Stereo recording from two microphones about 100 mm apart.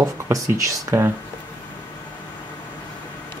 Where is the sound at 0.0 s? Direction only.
30° right (ahead or behind).